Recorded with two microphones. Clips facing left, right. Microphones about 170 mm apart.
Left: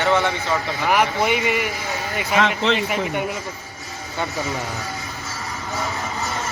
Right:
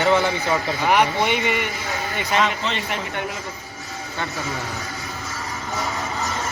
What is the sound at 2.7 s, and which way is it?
Speech, 5° left (ahead or behind).